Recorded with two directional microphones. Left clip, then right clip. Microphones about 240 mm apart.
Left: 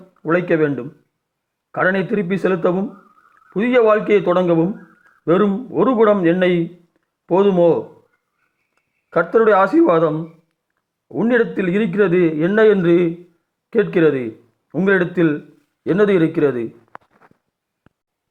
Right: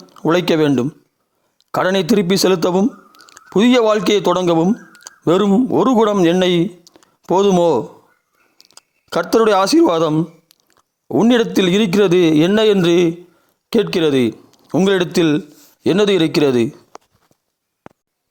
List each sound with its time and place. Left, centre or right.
0.2 s speech: right
8.7 s a sound: right
9.7 s speech: right
16.0 s speech: right